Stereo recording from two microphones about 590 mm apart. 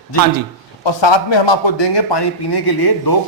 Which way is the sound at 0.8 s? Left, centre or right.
Left.